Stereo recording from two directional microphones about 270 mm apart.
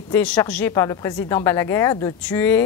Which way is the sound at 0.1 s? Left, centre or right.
Centre.